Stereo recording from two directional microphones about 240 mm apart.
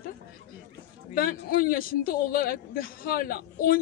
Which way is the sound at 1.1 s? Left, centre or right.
Left.